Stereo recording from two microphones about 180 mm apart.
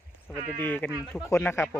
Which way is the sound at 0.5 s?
10° left (ahead or behind).